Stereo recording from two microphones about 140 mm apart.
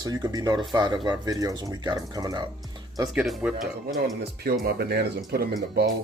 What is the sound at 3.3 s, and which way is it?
Speech, centre (ahead or behind).